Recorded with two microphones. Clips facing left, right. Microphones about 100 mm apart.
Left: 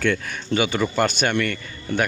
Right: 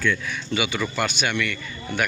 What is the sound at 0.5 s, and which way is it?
Speech, 40° left (ahead or behind).